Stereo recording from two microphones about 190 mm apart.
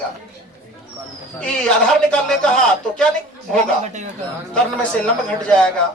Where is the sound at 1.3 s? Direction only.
5° left (ahead or behind).